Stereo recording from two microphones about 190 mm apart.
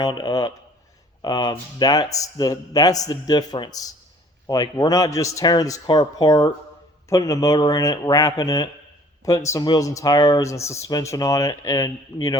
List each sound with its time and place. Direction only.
0.0 s speech: 20° left (ahead or behind)